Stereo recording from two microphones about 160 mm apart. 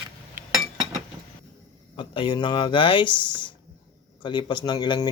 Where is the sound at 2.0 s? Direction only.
30° left (ahead or behind).